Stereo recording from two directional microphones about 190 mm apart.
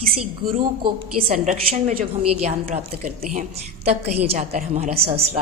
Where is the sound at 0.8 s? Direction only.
30° right (ahead or behind).